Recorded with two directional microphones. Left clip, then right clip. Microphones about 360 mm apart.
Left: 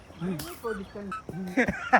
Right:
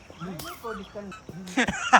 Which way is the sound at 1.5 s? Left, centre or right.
Centre.